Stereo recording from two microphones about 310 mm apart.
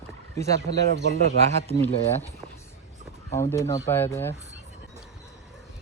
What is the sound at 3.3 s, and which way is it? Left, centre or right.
Speech, centre.